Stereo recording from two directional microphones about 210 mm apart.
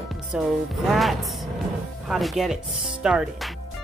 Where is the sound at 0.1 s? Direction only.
Centre (ahead or behind).